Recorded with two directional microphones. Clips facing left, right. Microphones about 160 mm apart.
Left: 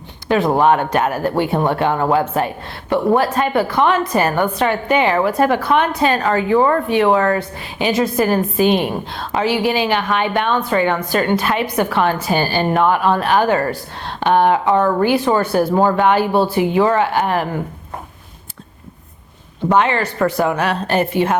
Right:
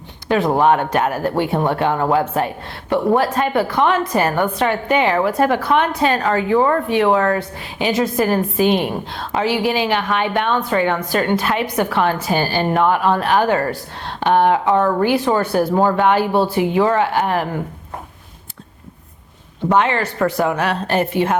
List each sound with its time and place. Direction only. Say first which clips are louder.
0.3 s a woman's voice: left 1 dB; 15° left (ahead or behind)
19.7 s a woman's voice: left 1 dB; 10° left (ahead or behind)